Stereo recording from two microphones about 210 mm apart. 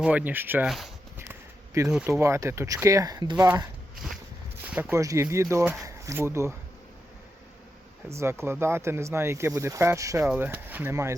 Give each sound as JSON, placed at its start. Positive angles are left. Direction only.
{"t": 0.0, "sound": "speech", "side_deg": -5}
{"t": 1.3, "sound": "a sound", "side_deg": -15}
{"t": 1.9, "sound": "speech", "side_deg": -5}
{"t": 4.7, "sound": "speech", "side_deg": -10}
{"t": 8.1, "sound": "speech", "side_deg": -15}